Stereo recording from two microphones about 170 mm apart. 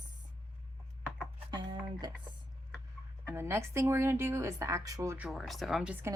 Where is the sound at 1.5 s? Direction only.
25° right (ahead or behind).